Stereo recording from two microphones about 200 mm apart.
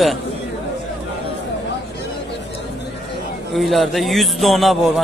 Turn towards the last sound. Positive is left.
turn(degrees=0)  # may be behind; listen again after turning